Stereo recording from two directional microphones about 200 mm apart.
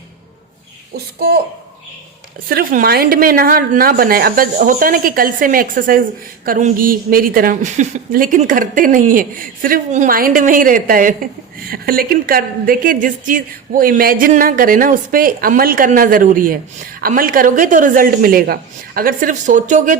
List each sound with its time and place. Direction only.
0.9 s a woman's voice: 50° right (ahead or behind)
2.5 s a woman's voice: 50° right (ahead or behind)